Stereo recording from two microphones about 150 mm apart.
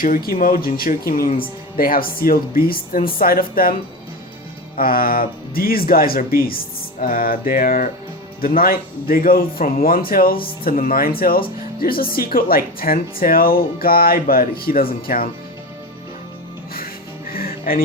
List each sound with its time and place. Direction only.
0.0 s speech: 75° left (ahead or behind)
4.8 s speech: 75° left (ahead or behind)
17.3 s music: 75° left (ahead or behind)